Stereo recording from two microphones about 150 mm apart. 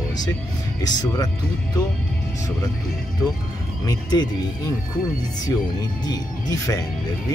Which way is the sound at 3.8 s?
25° left (ahead or behind).